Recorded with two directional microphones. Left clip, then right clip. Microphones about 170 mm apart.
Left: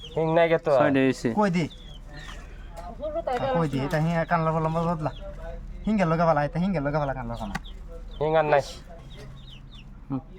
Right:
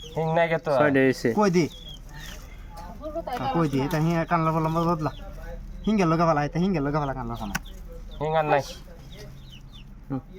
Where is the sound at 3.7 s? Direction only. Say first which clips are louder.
Right 1 dB; 35° left (ahead or behind).